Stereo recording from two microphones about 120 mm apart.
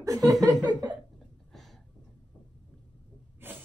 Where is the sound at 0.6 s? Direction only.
35° right (ahead or behind).